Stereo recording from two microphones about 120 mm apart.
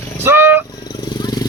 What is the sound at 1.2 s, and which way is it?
Vehicle, 35° left (ahead or behind).